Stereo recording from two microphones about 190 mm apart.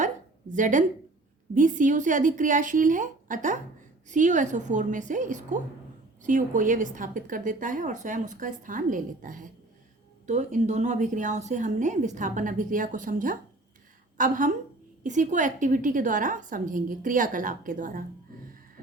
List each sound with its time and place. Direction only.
0.5 s a woman's voice: 40° right (ahead or behind)